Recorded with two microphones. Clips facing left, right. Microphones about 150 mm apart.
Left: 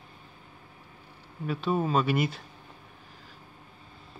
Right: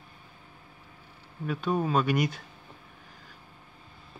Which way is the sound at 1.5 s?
5° left (ahead or behind).